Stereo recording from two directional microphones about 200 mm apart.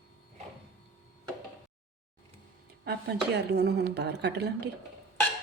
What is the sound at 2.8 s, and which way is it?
Speech, 55° right (ahead or behind).